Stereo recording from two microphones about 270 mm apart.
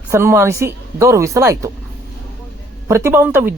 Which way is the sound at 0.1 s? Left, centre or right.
Centre.